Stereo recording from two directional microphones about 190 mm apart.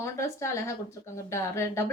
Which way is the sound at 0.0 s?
15° left (ahead or behind).